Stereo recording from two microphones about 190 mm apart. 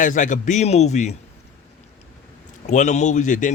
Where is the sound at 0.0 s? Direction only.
40° left (ahead or behind).